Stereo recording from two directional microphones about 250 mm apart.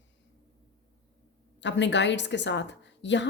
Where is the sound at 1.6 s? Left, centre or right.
Left.